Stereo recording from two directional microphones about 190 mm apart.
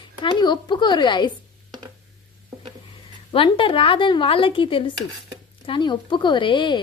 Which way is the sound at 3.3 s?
30° left (ahead or behind).